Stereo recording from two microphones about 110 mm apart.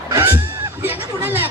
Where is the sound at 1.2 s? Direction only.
20° right (ahead or behind).